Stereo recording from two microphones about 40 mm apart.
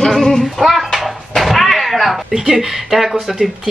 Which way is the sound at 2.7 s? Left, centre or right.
Centre.